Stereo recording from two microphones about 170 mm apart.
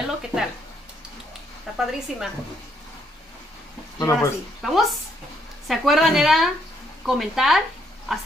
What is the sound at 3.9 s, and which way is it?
Speech, 15° left (ahead or behind).